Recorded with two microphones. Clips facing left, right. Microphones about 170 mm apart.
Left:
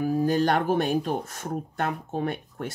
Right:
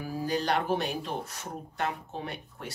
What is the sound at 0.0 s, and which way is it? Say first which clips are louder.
Speech: left 8 dB; 50° left (ahead or behind).